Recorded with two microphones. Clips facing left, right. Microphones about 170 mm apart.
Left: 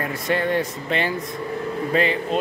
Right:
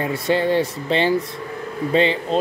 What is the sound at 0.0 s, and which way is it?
Speech, 30° right (ahead or behind).